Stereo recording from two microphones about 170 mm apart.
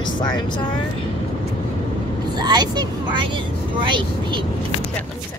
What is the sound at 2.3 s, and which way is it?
Speech, 25° right (ahead or behind).